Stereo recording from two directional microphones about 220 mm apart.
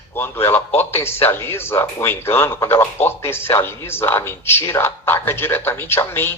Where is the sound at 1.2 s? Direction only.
10° left (ahead or behind).